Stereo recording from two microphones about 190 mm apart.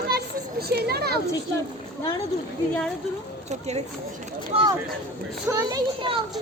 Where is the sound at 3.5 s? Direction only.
35° right (ahead or behind).